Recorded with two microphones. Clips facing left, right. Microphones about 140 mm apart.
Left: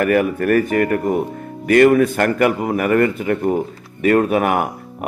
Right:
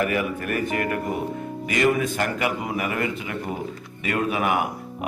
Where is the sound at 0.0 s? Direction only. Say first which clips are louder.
Left 8 dB; 50° left (ahead or behind).